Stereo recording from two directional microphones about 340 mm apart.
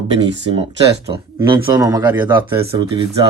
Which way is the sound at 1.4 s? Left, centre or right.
Centre.